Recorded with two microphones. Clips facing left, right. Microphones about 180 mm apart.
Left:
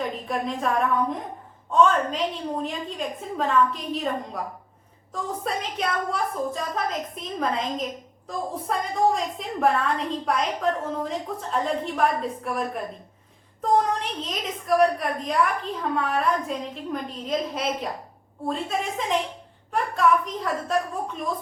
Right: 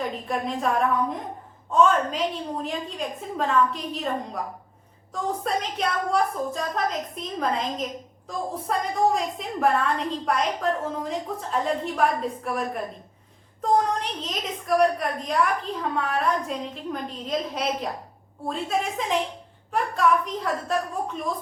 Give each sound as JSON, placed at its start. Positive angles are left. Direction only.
{"t": 0.0, "sound": "a woman's voice", "side_deg": 0}
{"t": 5.1, "sound": "a woman's voice", "side_deg": 0}